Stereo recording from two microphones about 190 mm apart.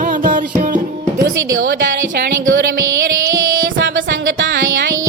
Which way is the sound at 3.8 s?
75° right (ahead or behind).